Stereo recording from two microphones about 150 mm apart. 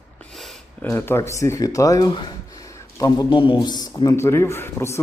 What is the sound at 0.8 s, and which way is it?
Speech, 15° left (ahead or behind).